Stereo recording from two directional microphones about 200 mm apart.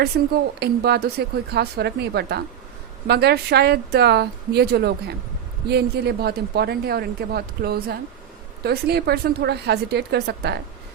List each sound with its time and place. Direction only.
0.1 s a woman's voice: 50° right (ahead or behind)